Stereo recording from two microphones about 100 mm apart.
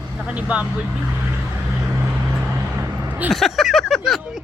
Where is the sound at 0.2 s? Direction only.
15° right (ahead or behind).